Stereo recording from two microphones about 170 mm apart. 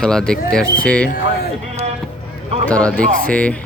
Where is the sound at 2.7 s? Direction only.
5° left (ahead or behind).